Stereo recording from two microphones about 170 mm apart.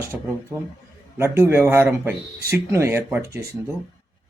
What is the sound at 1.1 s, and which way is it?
Speech, 15° right (ahead or behind).